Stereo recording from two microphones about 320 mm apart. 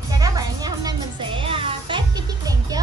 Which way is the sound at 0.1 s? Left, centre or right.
Centre.